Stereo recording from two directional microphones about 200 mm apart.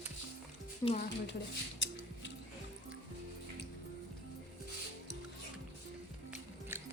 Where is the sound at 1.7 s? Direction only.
65° left (ahead or behind).